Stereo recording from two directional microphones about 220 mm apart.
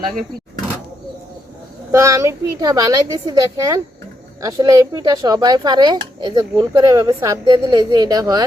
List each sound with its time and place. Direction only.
1.9 s speech: 15° right (ahead or behind)